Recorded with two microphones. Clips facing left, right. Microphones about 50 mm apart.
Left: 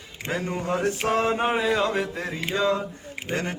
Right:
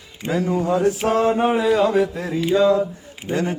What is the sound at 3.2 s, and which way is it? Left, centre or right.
Speech, left.